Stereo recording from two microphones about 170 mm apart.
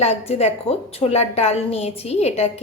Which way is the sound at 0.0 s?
40° left (ahead or behind).